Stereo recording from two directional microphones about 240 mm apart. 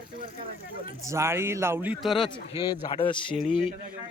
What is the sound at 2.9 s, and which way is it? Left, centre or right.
Speech, left.